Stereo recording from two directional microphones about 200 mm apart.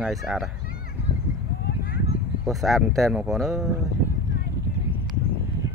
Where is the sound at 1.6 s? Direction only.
45° left (ahead or behind).